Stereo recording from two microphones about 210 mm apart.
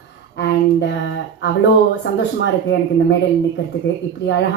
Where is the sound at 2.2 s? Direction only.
55° left (ahead or behind).